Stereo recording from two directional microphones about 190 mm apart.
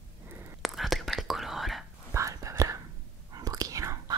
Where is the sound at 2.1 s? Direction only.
15° right (ahead or behind).